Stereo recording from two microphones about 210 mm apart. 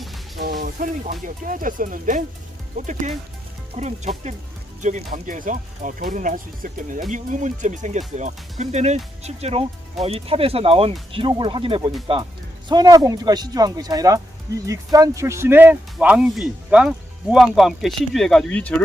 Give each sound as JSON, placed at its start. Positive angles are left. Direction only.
{"t": 0.6, "sound": "speech", "side_deg": -40}